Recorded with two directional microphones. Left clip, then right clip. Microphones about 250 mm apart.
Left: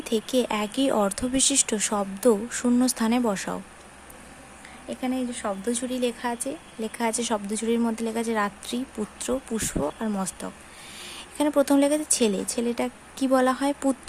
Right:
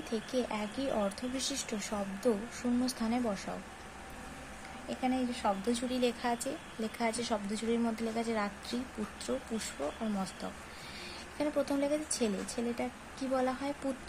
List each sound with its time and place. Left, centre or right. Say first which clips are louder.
0.1 s speech: left 11 dB; left
5.0 s speech: left 3 dB; left